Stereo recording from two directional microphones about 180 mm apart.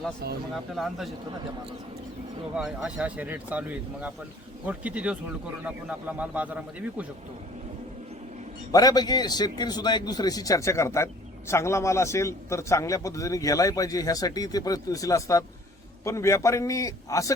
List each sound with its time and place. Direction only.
0.2 s speech: 60° right (ahead or behind)
0.8 s speech: centre (ahead or behind)
2.6 s speech: 5° right (ahead or behind)
8.7 s a man's voice: 20° left (ahead or behind)